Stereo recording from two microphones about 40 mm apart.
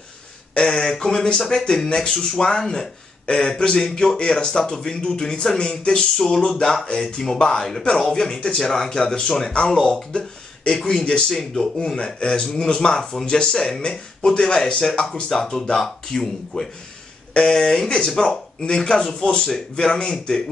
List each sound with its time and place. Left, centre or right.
0.6 s a man's voice: centre
7.1 s a man's voice: left
10.7 s a man's voice: centre